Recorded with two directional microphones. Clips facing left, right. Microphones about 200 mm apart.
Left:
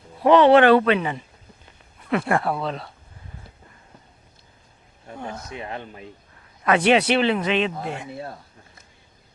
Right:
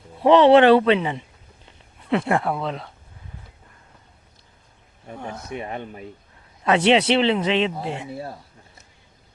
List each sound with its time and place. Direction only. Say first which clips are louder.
0.3 s speech: right 1 dB; 25° right (ahead or behind)
5.2 s speech: right 2 dB; 5° right (ahead or behind); by 7.7 s 25° right (ahead or behind)